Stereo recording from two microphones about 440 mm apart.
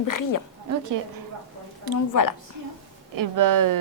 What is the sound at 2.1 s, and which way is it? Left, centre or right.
Speech, left.